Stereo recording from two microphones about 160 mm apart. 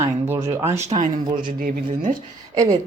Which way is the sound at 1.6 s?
60° right (ahead or behind).